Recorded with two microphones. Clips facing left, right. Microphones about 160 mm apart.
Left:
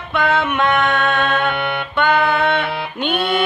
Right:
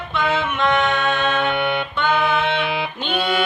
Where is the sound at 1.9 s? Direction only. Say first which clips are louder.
Left 6 dB; 60° left (ahead or behind).